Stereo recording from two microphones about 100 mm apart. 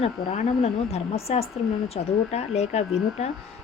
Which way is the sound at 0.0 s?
85° left.